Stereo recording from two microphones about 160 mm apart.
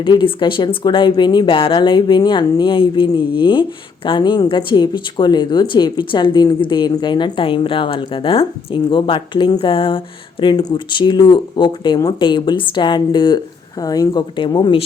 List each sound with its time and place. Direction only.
0.0 s speech: 30° left (ahead or behind)